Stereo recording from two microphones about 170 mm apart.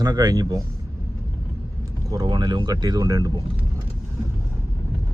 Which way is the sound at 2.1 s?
25° right (ahead or behind).